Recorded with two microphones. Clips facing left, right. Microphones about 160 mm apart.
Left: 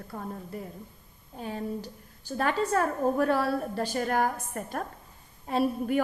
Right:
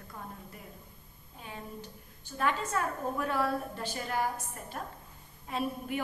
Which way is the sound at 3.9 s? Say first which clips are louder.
Left 5 dB; 50° left (ahead or behind).